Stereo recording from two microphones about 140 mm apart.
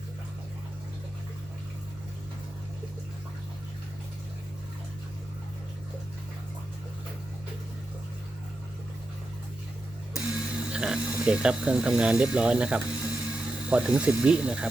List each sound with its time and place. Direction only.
10.3 s speech: 5° right (ahead or behind)